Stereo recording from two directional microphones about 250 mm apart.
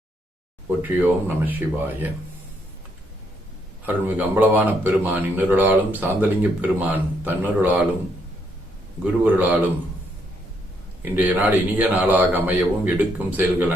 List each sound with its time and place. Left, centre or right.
0.8 s speech: centre
3.8 s speech: centre
9.2 s speech: centre
11.0 s speech: centre